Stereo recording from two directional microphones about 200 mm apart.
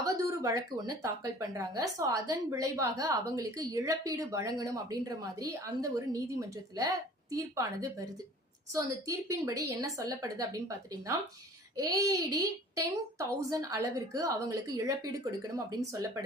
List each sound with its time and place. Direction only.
0.0 s a child's voice: 15° right (ahead or behind)